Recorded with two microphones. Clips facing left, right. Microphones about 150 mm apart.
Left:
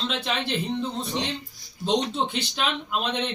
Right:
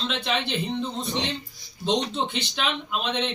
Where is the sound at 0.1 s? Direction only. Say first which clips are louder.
Even; centre (ahead or behind).